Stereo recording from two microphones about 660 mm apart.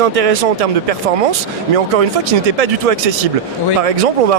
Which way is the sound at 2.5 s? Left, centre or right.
Right.